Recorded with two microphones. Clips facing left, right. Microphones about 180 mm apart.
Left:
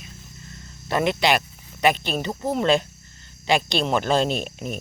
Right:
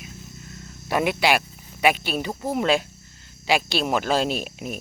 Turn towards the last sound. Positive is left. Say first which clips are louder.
# left 1 dB
turn(degrees=-5)  # may be behind; listen again after turning